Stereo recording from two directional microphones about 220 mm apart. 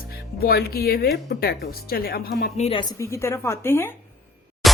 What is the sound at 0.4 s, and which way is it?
Speech, 45° left (ahead or behind).